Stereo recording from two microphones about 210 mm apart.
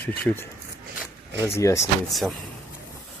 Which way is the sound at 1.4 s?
15° left (ahead or behind).